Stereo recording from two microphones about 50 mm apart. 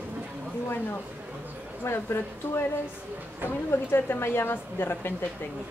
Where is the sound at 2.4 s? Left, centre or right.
Left.